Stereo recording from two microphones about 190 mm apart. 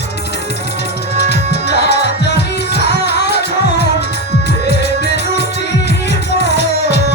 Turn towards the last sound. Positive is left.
turn(degrees=60)  # may be behind; listen again after turning